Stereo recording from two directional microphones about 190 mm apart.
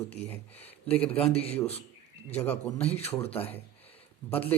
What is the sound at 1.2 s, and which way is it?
Speech, 30° left (ahead or behind).